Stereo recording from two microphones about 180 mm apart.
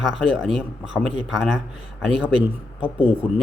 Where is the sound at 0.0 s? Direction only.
Centre (ahead or behind).